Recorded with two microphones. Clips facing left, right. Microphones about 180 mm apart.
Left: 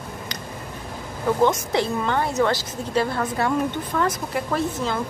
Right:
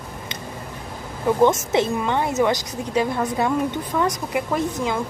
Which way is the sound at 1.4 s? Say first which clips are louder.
Right 4 dB; 20° right (ahead or behind).